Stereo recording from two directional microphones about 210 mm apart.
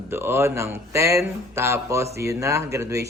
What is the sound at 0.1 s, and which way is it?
Speech, 10° right (ahead or behind).